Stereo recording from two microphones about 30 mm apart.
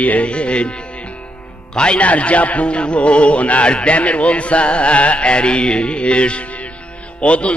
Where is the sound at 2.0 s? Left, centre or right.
Left.